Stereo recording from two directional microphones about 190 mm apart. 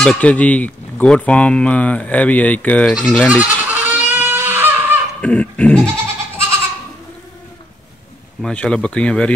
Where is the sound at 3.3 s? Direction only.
10° right (ahead or behind).